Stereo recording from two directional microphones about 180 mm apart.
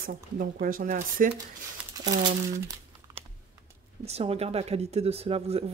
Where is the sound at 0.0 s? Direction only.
50° right (ahead or behind).